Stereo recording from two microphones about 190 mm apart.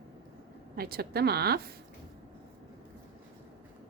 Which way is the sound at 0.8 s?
55° right (ahead or behind).